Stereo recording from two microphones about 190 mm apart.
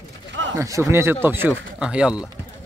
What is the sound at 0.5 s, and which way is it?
Speech, 15° right (ahead or behind).